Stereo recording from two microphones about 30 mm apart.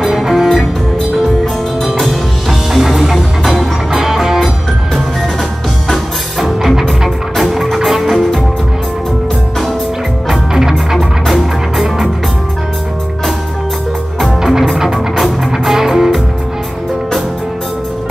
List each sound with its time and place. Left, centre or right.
0.1 s music: centre
1.2 s music: centre
6.4 s music: centre
10.5 s music: centre
11.2 s music: centre
15.7 s music: centre